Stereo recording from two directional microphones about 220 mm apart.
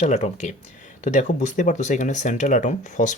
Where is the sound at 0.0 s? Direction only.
30° left (ahead or behind).